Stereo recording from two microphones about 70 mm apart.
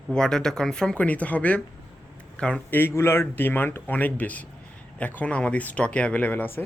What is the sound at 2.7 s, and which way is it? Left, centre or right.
Speech, left.